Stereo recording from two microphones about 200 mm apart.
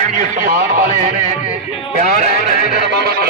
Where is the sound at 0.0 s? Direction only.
40° right (ahead or behind).